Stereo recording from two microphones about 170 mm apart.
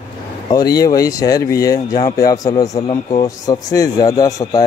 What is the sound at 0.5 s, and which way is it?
A man's voice, 20° left (ahead or behind).